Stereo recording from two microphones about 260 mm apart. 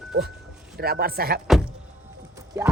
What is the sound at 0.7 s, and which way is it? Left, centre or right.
Speech, right.